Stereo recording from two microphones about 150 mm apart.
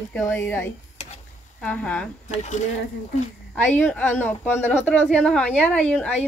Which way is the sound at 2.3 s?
50° left (ahead or behind).